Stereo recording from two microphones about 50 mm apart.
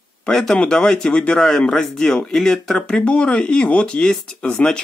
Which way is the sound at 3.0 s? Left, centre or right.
Left.